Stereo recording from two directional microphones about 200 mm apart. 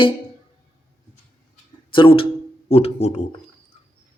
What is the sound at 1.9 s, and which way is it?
Speech, 25° left (ahead or behind).